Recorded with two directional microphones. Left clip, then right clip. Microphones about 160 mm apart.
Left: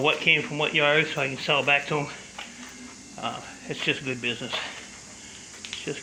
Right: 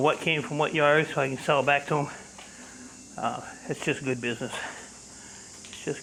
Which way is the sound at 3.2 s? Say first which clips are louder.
Right 2 dB; 35° right (ahead or behind).